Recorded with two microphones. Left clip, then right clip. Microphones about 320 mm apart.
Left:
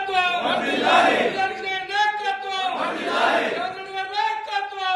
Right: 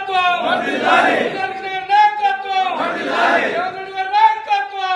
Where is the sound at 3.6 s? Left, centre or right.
Centre.